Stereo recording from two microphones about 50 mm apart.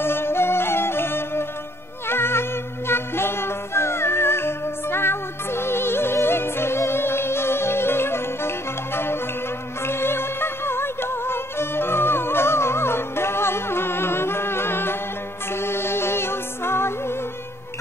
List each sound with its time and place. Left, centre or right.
0.0 s music: left